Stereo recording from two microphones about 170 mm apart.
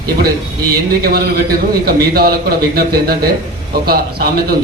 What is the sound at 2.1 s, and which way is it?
A man's voice, 65° right (ahead or behind).